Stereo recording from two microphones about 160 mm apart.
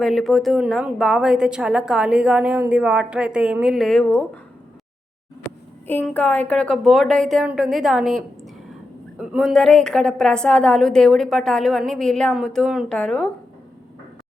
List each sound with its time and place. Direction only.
0.0 s a woman's voice: centre (ahead or behind)
5.9 s a woman's voice: 10° left (ahead or behind)